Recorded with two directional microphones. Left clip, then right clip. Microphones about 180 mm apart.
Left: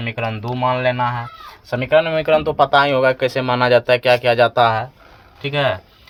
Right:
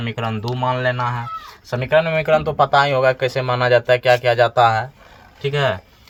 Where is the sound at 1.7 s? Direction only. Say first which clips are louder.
Left 1 dB; 35° left (ahead or behind).